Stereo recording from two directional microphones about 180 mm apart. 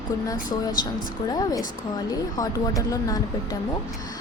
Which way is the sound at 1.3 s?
20° left (ahead or behind).